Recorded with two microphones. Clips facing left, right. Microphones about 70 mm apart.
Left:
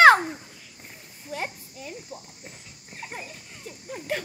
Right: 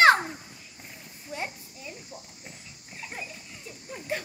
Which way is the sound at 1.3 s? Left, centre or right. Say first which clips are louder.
Left 3 dB; left.